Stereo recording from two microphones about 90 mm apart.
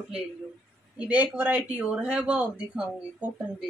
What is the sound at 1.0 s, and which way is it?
Speech, 20° right (ahead or behind).